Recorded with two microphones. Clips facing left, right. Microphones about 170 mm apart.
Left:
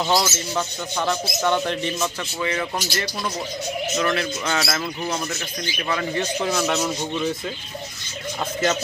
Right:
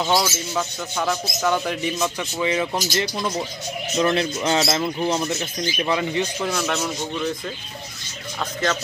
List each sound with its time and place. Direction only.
0.0 s speech: centre (ahead or behind); by 6.2 s 15° right (ahead or behind)
6.4 s speech: 5° left (ahead or behind)